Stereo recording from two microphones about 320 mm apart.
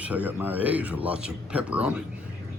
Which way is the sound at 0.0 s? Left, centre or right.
Centre.